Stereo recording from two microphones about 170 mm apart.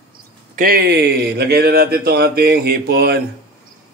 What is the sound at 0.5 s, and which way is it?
Speech, 60° right (ahead or behind).